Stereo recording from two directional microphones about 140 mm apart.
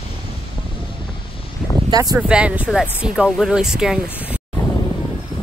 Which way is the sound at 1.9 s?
25° right (ahead or behind).